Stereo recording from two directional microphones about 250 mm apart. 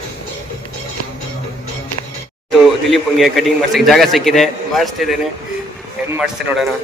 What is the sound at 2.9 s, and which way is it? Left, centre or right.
A man's voice, centre.